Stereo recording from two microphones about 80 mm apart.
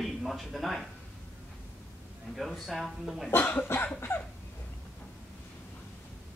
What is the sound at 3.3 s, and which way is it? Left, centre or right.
Cough, left.